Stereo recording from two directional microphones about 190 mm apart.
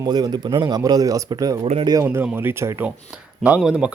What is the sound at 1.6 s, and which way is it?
Speech, 30° right (ahead or behind).